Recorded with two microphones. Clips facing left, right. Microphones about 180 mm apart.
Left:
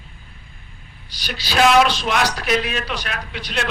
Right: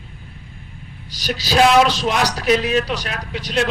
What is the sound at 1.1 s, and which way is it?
A man's voice, 40° right (ahead or behind).